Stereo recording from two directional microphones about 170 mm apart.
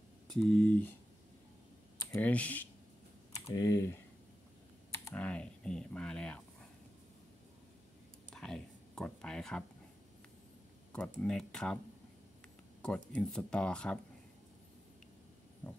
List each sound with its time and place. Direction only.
0.3 s speech: 5° left (ahead or behind)
2.1 s speech: 10° left (ahead or behind)
3.5 s speech: 20° left (ahead or behind)
8.3 s a sound: 5° left (ahead or behind)
11.1 s speech: 5° left (ahead or behind)
12.8 s speech: 5° left (ahead or behind)
15.6 s speech: 10° left (ahead or behind)